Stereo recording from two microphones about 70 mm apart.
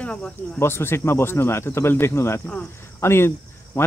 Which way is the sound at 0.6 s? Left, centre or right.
Left.